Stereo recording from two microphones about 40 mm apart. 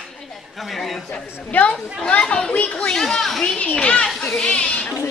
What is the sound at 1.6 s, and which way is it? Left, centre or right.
Speech, left.